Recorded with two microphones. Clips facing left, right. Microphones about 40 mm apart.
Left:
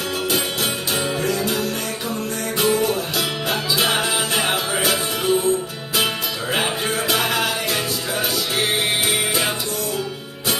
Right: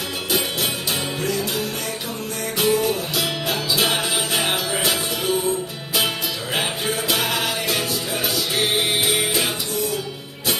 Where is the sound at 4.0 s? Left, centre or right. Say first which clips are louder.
Left 2 dB; centre.